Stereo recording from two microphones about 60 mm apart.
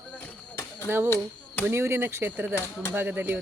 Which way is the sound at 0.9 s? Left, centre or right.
Right.